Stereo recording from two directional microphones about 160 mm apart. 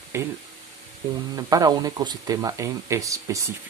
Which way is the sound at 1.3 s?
25° right (ahead or behind).